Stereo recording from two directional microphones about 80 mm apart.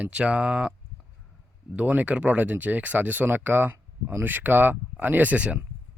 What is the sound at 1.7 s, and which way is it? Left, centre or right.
Speech, right.